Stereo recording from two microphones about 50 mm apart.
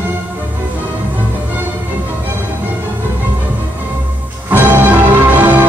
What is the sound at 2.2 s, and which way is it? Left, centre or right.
Music, right.